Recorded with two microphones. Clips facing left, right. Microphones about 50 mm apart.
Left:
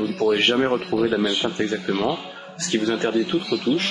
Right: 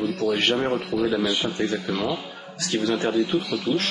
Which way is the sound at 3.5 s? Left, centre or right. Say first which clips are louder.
Left 3 dB; left.